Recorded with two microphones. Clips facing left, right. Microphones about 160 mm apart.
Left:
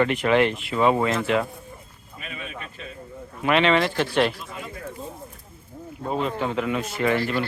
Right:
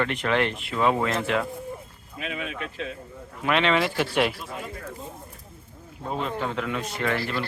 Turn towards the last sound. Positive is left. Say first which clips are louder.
# left 4 dB
turn(degrees=10)  # may be behind; listen again after turning